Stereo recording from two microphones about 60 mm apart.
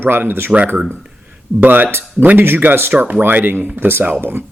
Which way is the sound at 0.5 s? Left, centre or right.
Right.